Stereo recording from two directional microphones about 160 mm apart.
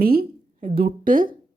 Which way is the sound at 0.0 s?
70° right (ahead or behind).